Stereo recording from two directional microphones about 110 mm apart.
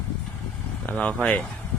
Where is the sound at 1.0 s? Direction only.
10° left (ahead or behind).